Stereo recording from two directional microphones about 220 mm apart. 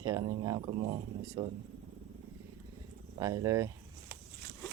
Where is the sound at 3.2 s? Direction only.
15° right (ahead or behind).